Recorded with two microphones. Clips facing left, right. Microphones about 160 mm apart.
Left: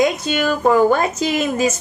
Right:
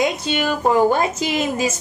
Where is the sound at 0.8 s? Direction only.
20° right (ahead or behind).